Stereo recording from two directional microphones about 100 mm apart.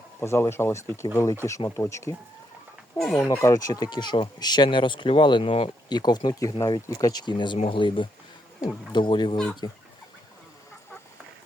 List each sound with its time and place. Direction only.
0.2 s speech: 25° left (ahead or behind)
3.0 s speech: 5° left (ahead or behind)
3.4 s speech: 35° left (ahead or behind); by 5.7 s 65° left (ahead or behind)
5.9 s speech: 45° left (ahead or behind)